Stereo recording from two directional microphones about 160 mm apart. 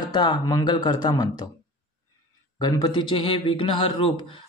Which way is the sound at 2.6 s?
25° left (ahead or behind).